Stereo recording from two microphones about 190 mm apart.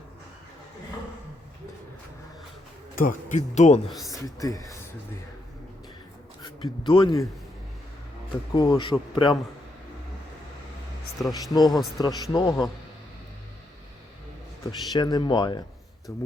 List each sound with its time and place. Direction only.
2.9 s speech: 45° left (ahead or behind)
3.9 s speech: centre (ahead or behind)
4.2 s speech: 20° left (ahead or behind)
6.4 s speech: 25° left (ahead or behind)
8.5 s speech: 20° left (ahead or behind)
11.2 s speech: centre (ahead or behind)
11.5 s speech: 20° left (ahead or behind)
14.7 s speech: 20° left (ahead or behind)